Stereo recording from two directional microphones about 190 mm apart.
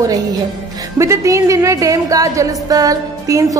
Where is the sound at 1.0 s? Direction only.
15° right (ahead or behind).